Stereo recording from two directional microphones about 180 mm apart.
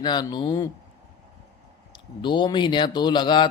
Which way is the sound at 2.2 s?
25° left (ahead or behind).